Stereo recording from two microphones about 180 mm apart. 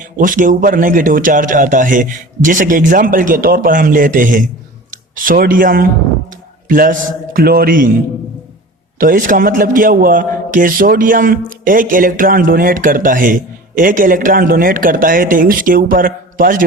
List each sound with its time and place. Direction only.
0.0 s a man's voice: 45° right (ahead or behind)
9.0 s a man's voice: 50° right (ahead or behind)